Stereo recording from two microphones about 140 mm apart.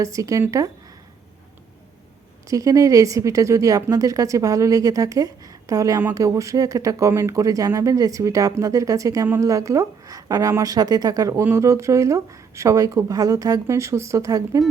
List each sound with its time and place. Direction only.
0.0 s a woman's voice: 25° right (ahead or behind)
2.5 s a woman's voice: 25° right (ahead or behind)